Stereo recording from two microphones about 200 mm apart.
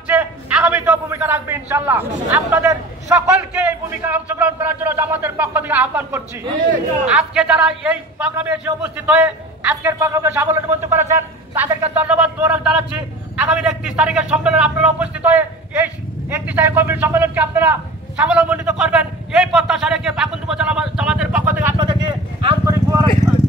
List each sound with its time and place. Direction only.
0.1 s a sound: 5° right (ahead or behind)
4.0 s a man's voice: 10° right (ahead or behind)
21.7 s vehicle: 25° right (ahead or behind)